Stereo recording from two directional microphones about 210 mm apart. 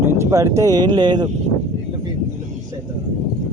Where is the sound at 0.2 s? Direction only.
15° right (ahead or behind).